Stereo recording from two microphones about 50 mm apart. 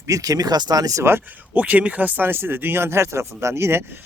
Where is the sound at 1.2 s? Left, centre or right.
Right.